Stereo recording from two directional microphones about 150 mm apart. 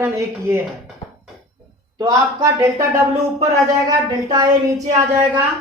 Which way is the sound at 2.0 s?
25° right (ahead or behind).